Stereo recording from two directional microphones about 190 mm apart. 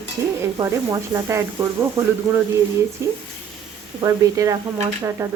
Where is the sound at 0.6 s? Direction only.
15° right (ahead or behind).